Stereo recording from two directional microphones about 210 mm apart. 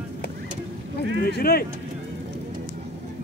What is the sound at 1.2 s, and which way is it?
Speech, 45° left (ahead or behind).